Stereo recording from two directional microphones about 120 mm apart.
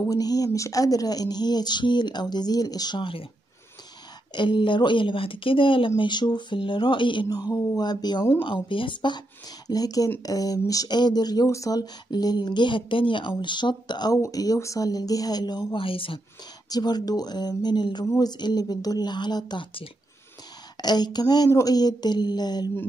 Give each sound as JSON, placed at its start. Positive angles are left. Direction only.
{"t": 0.1, "sound": "speech", "side_deg": 30}
{"t": 4.3, "sound": "speech", "side_deg": 40}
{"t": 9.7, "sound": "speech", "side_deg": 30}
{"t": 16.6, "sound": "speech", "side_deg": 35}
{"t": 18.0, "sound": "speech", "side_deg": 25}
{"t": 18.4, "sound": "speech", "side_deg": 35}
{"t": 20.8, "sound": "speech", "side_deg": 35}